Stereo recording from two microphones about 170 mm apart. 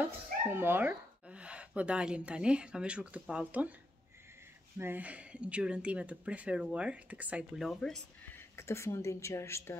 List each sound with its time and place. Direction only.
0.0 s speech: 15° right (ahead or behind)
4.7 s speech: 10° right (ahead or behind)
8.5 s a woman's voice: 15° left (ahead or behind)